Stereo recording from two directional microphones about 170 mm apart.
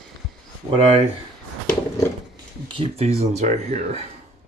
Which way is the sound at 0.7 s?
35° right (ahead or behind).